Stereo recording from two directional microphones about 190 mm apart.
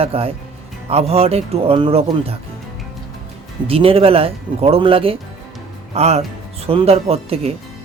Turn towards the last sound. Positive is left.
turn(degrees=-30)  # may be behind; listen again after turning